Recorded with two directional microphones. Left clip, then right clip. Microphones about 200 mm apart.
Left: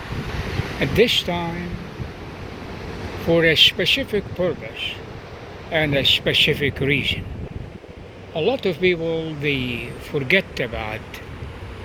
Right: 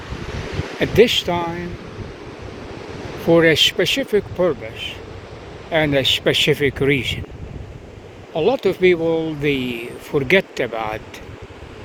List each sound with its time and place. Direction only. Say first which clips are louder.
0.8 s speech: right 3 dB; 35° right (ahead or behind)
3.2 s speech: right 2 dB; 30° right (ahead or behind)
8.3 s speech: right 3 dB; 30° right (ahead or behind)